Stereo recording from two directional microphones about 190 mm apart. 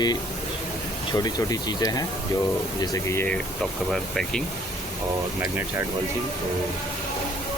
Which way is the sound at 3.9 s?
Centre (ahead or behind).